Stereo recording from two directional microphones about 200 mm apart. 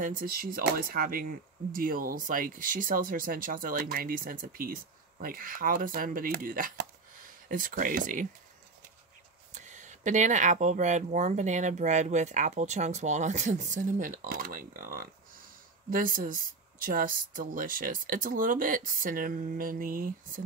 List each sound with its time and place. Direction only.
0.0 s speech: 45° right (ahead or behind)
9.5 s speech: 35° right (ahead or behind)